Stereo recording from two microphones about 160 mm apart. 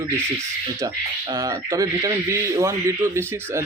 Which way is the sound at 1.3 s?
20° right (ahead or behind).